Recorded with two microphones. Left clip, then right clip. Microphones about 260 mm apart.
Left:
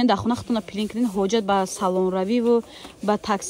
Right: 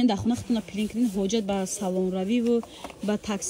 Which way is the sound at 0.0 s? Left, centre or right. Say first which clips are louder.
Left 5 dB; centre.